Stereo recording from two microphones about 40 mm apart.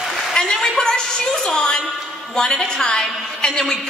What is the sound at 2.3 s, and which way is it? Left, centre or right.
Speech, left.